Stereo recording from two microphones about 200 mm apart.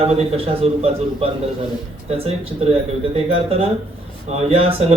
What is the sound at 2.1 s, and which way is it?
A man's voice, 30° right (ahead or behind).